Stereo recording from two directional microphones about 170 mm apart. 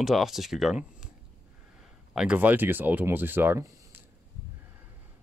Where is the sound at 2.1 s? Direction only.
5° right (ahead or behind).